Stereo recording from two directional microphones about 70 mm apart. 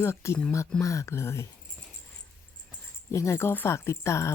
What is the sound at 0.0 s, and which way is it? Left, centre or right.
Speech, left.